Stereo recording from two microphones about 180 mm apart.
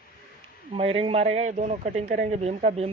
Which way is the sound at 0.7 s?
30° right (ahead or behind).